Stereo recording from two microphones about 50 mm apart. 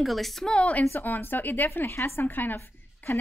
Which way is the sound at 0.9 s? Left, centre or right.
Left.